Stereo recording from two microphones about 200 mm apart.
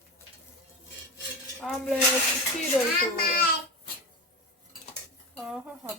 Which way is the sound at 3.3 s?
45° left (ahead or behind).